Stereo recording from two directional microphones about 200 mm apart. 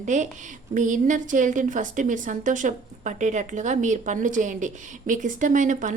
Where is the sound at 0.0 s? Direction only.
35° right (ahead or behind).